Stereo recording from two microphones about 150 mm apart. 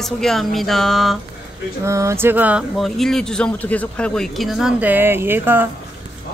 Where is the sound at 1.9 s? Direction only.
20° right (ahead or behind).